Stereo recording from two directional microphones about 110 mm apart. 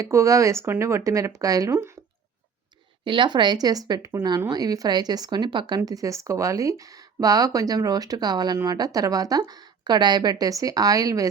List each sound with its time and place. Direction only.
0.0 s speech: 30° right (ahead or behind)
3.0 s speech: 50° right (ahead or behind); by 11.3 s 30° right (ahead or behind)